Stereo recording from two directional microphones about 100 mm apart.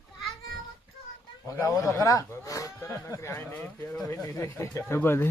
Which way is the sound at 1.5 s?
35° left (ahead or behind).